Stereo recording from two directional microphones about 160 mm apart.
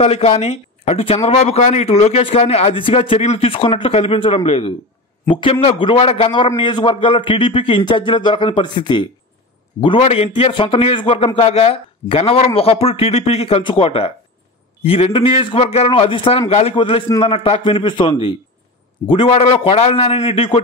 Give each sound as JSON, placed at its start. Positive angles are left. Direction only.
{"t": 0.0, "sound": "a man's voice", "side_deg": 40}